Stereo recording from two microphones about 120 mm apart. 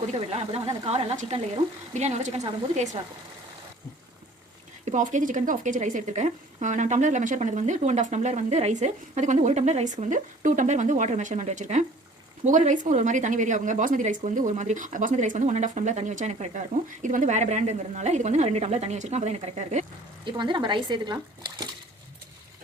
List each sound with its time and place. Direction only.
0.1 s a woman's voice: 60° right (ahead or behind)
4.9 s speech: 90° right; by 19.8 s 70° right (ahead or behind)
20.2 s speech: 40° right (ahead or behind)